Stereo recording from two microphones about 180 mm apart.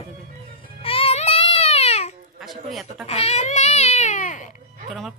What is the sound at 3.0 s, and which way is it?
Speech, 35° left (ahead or behind).